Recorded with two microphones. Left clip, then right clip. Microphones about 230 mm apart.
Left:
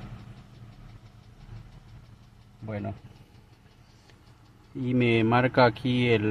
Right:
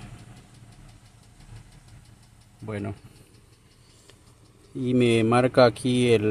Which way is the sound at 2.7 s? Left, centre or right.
Right.